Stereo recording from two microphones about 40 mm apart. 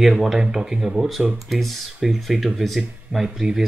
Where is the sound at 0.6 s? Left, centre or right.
Right.